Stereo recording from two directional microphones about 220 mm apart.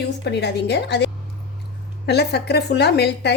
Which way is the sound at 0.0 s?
50° left (ahead or behind).